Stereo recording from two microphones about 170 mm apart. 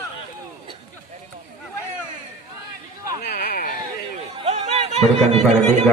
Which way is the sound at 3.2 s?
70° left (ahead or behind).